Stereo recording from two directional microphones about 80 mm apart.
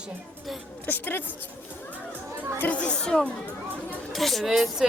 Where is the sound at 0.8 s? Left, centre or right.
Left.